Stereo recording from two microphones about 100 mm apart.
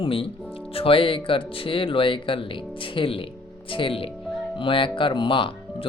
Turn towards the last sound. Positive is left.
turn(degrees=60)  # may be behind; listen again after turning